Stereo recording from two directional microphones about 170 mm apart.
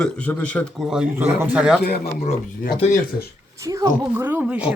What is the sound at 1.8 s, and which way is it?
Speech, 65° left (ahead or behind).